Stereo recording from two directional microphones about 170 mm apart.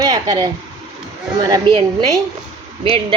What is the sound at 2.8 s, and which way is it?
Speech, 30° right (ahead or behind).